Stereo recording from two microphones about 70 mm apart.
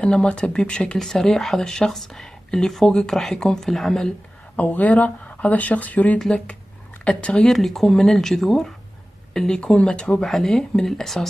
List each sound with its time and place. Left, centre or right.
0.0 s speech: centre
4.6 s speech: left
7.5 s speech: centre